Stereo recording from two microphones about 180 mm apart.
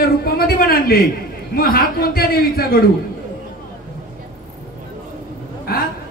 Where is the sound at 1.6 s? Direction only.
55° left (ahead or behind).